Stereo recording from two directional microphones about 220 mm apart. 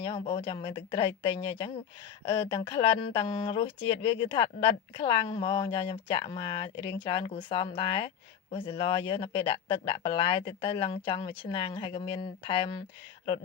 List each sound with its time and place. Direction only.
0.0 s speech: 25° left (ahead or behind)